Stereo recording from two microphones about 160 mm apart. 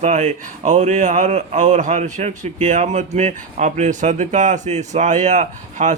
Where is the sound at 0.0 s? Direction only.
50° right (ahead or behind).